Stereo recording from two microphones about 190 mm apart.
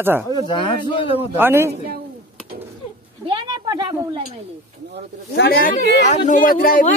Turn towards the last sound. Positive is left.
turn(degrees=50)  # may be behind; listen again after turning